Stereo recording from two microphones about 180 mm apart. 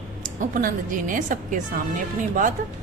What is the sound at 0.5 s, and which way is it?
A woman's voice, 45° right (ahead or behind).